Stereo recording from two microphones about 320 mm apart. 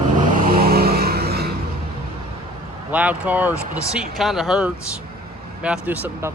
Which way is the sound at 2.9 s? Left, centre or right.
Centre.